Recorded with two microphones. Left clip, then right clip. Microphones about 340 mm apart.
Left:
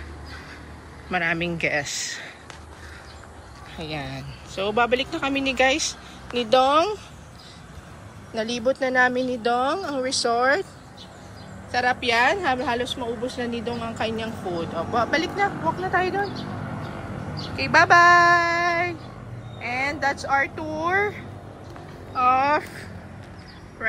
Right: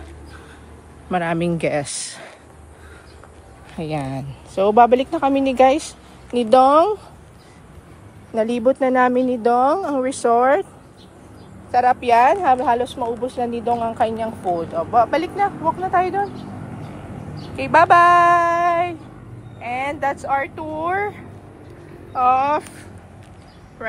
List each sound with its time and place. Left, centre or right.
1.1 s speech: centre
3.7 s speech: centre
8.4 s speech: centre
11.7 s speech: centre
17.6 s speech: centre
19.6 s speech: centre
22.1 s speech: centre